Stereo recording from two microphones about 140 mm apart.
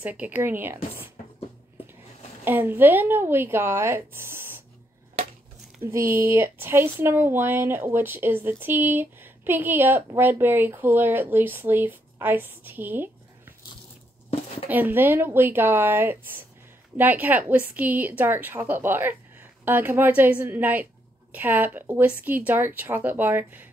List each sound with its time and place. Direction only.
0.0 s speech: 10° right (ahead or behind)
2.4 s speech: 15° right (ahead or behind)
5.8 s speech: 20° right (ahead or behind)
14.7 s speech: 15° right (ahead or behind)